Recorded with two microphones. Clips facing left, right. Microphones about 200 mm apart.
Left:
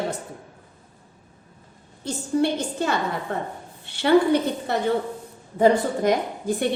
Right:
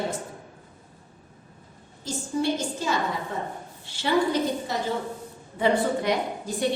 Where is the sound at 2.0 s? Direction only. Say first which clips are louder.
Left 4 dB; 60° left (ahead or behind).